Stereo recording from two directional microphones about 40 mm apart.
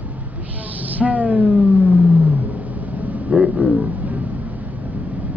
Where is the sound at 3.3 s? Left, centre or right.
Right.